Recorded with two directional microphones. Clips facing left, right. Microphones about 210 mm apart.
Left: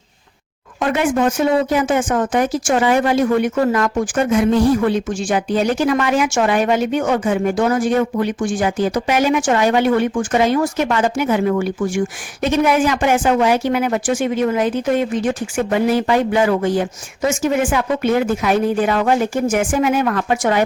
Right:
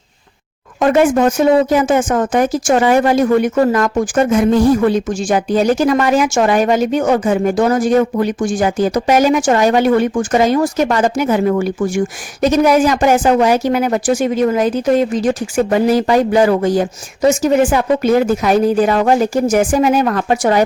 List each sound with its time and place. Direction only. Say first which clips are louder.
0.8 s speech: right 5 dB; 45° right (ahead or behind)